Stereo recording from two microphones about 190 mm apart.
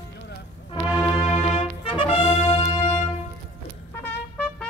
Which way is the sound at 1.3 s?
30° left (ahead or behind).